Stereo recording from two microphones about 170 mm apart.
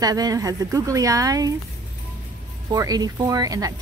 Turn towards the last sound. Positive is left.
turn(degrees=-20)  # may be behind; listen again after turning